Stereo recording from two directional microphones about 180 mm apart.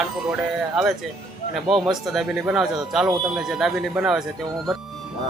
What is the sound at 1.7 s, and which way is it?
Speech, centre (ahead or behind).